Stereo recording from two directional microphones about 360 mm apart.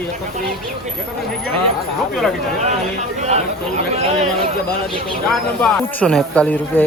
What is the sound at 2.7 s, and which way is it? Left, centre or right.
Speech, centre.